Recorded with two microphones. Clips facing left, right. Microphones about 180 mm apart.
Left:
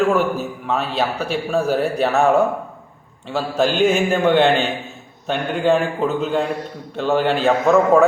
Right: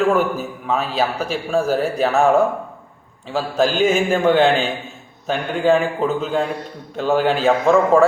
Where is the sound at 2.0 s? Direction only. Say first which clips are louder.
Right 1 dB; centre (ahead or behind).